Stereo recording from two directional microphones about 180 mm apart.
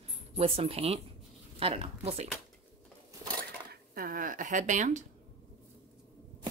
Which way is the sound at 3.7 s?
55° right (ahead or behind).